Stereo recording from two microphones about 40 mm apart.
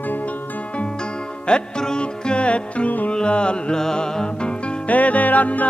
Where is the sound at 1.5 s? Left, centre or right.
Left.